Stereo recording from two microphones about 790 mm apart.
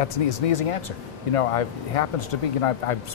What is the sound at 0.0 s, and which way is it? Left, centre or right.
Speech, left.